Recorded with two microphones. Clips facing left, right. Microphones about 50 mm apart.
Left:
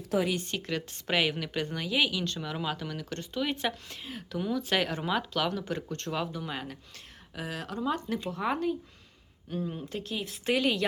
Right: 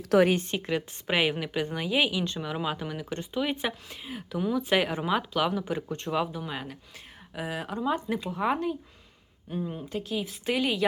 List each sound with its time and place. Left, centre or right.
0.0 s speech: right
0.3 s speech: right
0.5 s speech: centre